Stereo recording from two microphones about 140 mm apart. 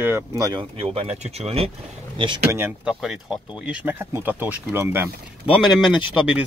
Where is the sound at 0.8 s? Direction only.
45° right (ahead or behind).